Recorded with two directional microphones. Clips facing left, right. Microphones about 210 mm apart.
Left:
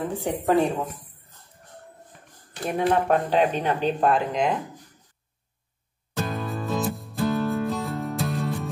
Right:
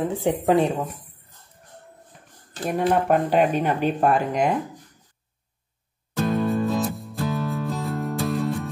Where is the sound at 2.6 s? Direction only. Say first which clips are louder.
Right 1 dB; 5° right (ahead or behind).